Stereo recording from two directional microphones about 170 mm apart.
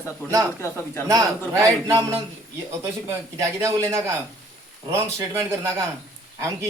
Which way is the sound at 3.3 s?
15° right (ahead or behind).